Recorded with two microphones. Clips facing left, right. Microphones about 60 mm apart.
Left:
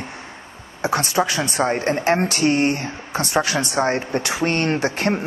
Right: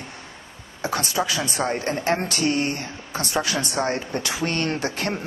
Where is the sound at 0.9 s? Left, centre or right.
Left.